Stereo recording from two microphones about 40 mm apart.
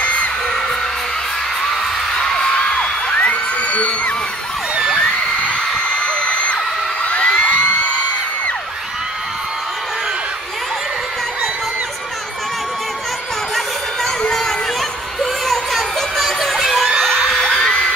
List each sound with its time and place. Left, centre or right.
2.1 s music: left
6.2 s a sound: left
15.4 s music: centre
16.9 s crowd: centre